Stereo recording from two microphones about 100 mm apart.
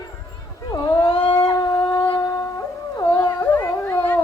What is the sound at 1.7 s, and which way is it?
Humming, 50° left (ahead or behind).